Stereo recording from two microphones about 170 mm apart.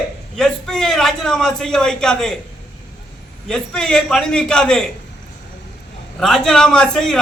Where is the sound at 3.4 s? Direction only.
5° left (ahead or behind).